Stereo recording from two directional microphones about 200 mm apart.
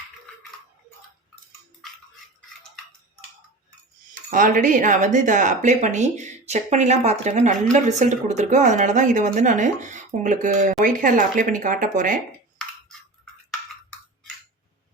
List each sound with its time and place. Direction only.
4.1 s speech: 40° right (ahead or behind)